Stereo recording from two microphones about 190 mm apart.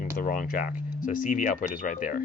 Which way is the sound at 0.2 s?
50° left (ahead or behind).